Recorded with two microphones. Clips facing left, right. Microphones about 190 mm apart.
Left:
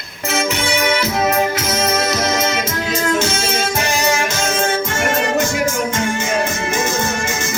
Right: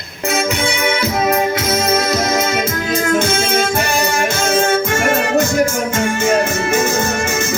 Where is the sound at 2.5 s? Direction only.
55° right (ahead or behind).